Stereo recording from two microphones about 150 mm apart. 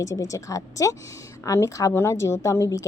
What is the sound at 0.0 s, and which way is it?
A woman's voice, 20° left (ahead or behind).